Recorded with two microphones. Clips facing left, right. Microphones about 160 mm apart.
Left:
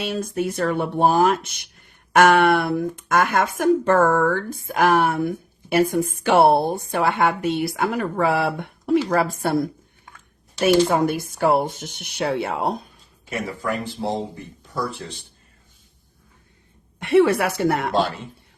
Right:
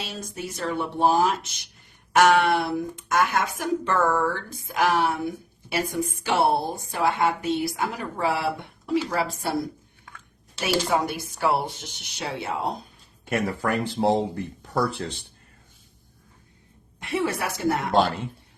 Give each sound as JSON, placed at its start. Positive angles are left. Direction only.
{"t": 0.0, "sound": "speech", "side_deg": 55}
{"t": 10.6, "sound": "speech", "side_deg": 55}
{"t": 13.2, "sound": "speech", "side_deg": -60}
{"t": 17.0, "sound": "speech", "side_deg": 65}
{"t": 17.9, "sound": "speech", "side_deg": -55}